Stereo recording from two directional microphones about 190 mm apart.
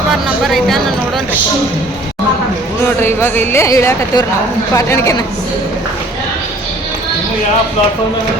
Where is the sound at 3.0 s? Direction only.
10° left (ahead or behind).